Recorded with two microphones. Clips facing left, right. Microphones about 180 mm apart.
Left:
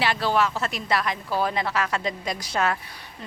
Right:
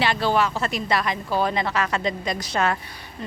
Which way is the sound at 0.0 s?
5° left (ahead or behind).